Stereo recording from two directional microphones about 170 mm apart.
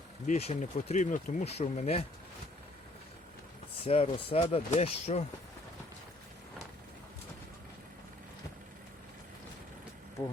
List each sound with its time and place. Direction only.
0.3 s speech: 40° left (ahead or behind)
3.8 s speech: 35° left (ahead or behind)